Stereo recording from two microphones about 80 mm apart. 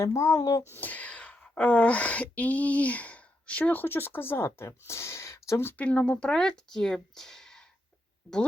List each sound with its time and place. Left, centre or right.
0.0 s speech: left
0.8 s speech: centre; by 5.7 s left
5.7 s speech: centre